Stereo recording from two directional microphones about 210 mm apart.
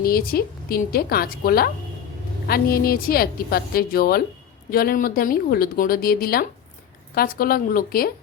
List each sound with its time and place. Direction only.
0.0 s a woman's voice: 45° left (ahead or behind)